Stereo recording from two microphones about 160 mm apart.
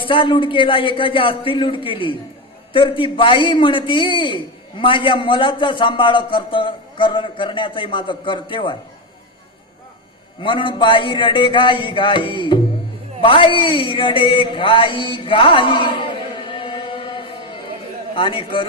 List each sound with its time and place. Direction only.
0.0 s a man's voice: 30° left (ahead or behind)
10.4 s a man's voice: 30° left (ahead or behind)
13.2 s a sound: 30° left (ahead or behind)
18.1 s a man's voice: 35° left (ahead or behind)